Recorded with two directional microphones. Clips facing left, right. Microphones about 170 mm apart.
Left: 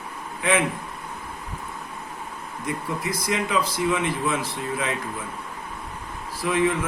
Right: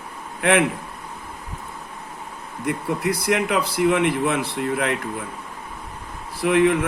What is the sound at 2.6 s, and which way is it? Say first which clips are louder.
A man's voice: right 5 dB; 70° right (ahead or behind).